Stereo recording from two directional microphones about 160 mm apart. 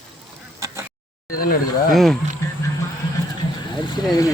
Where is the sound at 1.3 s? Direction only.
65° left (ahead or behind).